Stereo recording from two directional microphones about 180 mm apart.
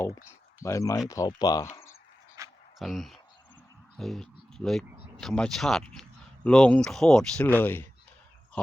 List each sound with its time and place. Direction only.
0.0 s speech: 15° left (ahead or behind)
2.4 s a sound: 15° right (ahead or behind)
2.7 s speech: centre (ahead or behind)